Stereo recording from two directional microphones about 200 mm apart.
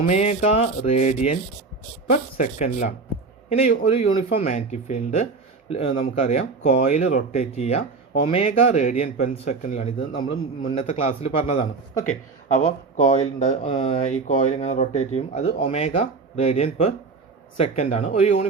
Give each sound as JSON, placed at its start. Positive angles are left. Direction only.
{"t": 0.0, "sound": "a man's voice", "side_deg": 35}